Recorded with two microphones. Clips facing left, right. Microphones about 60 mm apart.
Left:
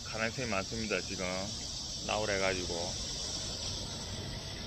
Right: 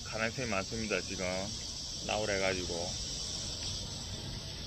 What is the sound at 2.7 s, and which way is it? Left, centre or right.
Speech, left.